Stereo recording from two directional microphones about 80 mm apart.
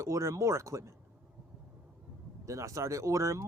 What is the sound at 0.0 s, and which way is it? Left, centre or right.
Speech, right.